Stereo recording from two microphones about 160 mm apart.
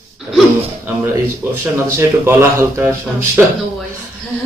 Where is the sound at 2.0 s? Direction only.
15° right (ahead or behind).